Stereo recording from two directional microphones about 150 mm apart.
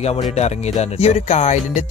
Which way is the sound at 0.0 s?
45° left (ahead or behind).